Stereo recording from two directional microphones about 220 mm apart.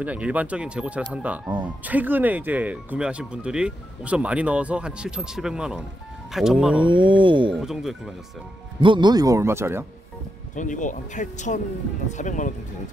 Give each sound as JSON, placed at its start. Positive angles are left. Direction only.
{"t": 0.0, "sound": "speech", "side_deg": -5}
{"t": 6.8, "sound": "speech", "side_deg": -20}
{"t": 7.6, "sound": "speech", "side_deg": 0}
{"t": 8.8, "sound": "speech", "side_deg": -20}
{"t": 10.5, "sound": "speech", "side_deg": 35}